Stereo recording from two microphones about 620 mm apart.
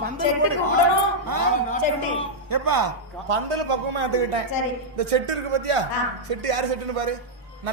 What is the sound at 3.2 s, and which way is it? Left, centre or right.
A man's voice, right.